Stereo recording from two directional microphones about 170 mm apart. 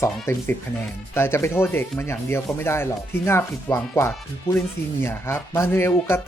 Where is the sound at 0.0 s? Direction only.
15° left (ahead or behind).